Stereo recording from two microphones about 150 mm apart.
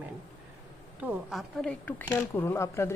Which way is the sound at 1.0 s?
5° right (ahead or behind).